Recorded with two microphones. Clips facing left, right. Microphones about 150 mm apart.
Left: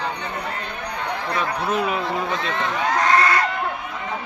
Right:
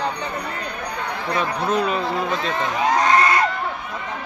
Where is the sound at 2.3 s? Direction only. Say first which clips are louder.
Right 1 dB; 10° right (ahead or behind).